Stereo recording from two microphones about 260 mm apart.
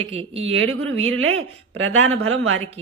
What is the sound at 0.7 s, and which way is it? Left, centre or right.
Speech, right.